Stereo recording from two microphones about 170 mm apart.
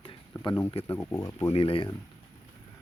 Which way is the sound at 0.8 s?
15° left (ahead or behind).